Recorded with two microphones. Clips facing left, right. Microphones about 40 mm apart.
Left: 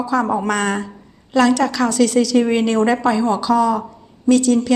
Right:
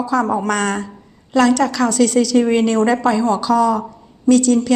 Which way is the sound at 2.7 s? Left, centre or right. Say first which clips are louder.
Right 1 dB; left.